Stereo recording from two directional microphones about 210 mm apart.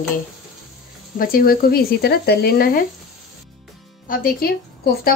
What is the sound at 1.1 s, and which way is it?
Speech, 45° left (ahead or behind).